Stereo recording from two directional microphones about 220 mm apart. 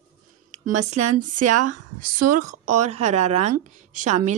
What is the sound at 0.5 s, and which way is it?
Speech, 30° right (ahead or behind).